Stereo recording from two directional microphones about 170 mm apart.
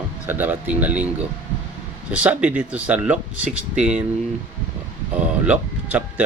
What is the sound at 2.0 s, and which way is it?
Speech, 5° right (ahead or behind).